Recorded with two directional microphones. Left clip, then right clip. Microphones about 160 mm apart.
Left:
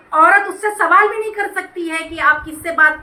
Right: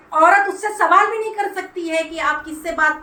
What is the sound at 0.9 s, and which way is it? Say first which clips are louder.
A woman's voice: left 2 dB; 5° left (ahead or behind).